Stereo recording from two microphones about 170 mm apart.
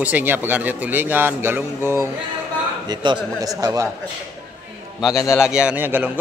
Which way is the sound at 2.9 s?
25° right (ahead or behind).